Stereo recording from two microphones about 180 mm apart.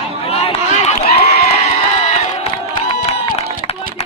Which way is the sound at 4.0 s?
35° left (ahead or behind).